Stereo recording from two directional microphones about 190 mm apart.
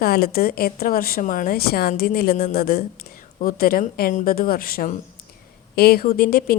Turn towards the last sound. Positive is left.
turn(degrees=50)  # may be behind; listen again after turning